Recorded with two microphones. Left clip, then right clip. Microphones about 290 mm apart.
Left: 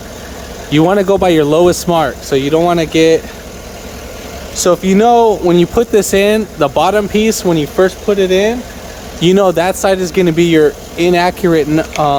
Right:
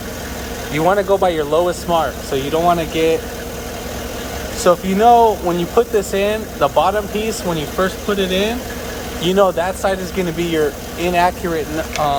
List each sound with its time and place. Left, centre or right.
0.7 s speech: left
4.5 s speech: left